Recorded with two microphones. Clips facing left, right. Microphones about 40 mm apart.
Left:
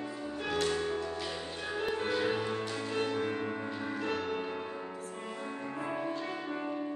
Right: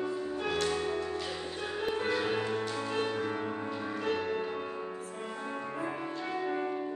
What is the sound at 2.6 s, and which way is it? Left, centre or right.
Music, centre.